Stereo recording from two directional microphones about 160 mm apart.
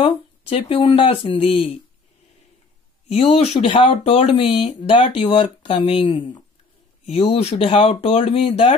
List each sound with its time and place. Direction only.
0.0 s speech: 40° left (ahead or behind)
3.1 s speech: 40° left (ahead or behind)